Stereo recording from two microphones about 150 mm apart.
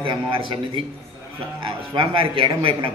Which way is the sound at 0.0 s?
35° right (ahead or behind).